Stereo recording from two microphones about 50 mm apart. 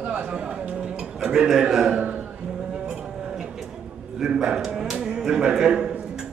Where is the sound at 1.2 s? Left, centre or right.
Centre.